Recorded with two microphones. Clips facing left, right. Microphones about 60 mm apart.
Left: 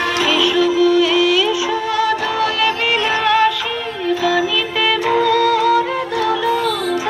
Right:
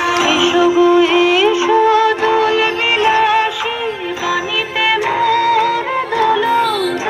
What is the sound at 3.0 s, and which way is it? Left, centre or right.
Music, centre.